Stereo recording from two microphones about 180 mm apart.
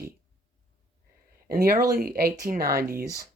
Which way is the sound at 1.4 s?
55° right (ahead or behind).